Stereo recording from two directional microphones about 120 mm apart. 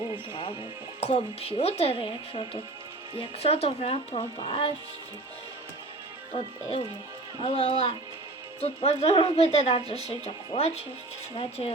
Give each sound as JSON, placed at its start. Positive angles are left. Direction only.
{"t": 1.0, "sound": "a woman's voice", "side_deg": 55}
{"t": 3.2, "sound": "a woman's voice", "side_deg": 60}
{"t": 6.3, "sound": "a woman's voice", "side_deg": 50}